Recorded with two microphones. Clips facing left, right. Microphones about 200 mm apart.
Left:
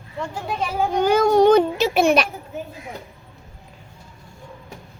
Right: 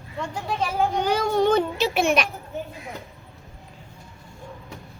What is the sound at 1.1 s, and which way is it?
Speech, 45° left (ahead or behind).